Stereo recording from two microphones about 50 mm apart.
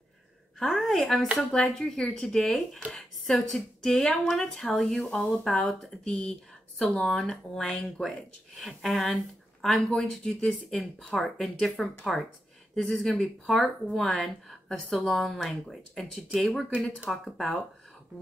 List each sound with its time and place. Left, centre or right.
0.7 s speech: centre
8.0 s speech: left
8.5 s speech: centre
10.8 s speech: centre
13.5 s speech: centre